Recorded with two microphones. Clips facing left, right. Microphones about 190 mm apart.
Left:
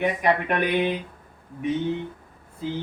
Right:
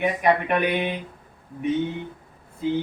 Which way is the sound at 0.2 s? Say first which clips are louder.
Right 2 dB; 5° right (ahead or behind).